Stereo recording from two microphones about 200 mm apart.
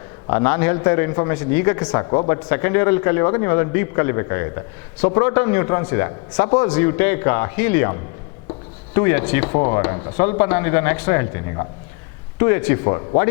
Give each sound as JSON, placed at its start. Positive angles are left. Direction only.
{"t": 0.3, "sound": "a man's voice", "side_deg": 20}
{"t": 9.0, "sound": "speech", "side_deg": 15}